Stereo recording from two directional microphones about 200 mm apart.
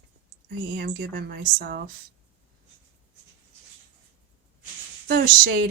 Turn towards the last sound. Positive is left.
turn(degrees=-45)  # may be behind; listen again after turning